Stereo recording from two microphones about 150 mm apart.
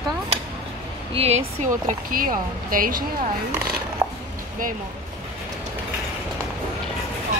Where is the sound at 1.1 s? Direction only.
45° right (ahead or behind); by 3.1 s 70° right (ahead or behind).